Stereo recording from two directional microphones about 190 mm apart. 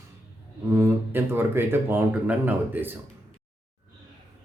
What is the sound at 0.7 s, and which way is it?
Speech, 10° right (ahead or behind).